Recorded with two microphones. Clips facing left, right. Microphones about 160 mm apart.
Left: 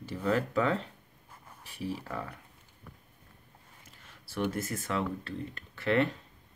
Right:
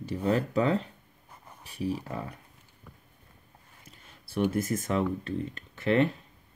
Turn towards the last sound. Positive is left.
turn(degrees=-20)  # may be behind; listen again after turning